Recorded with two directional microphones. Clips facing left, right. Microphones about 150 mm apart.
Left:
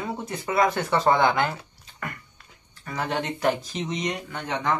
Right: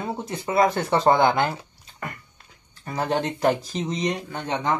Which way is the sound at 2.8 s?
35° right (ahead or behind).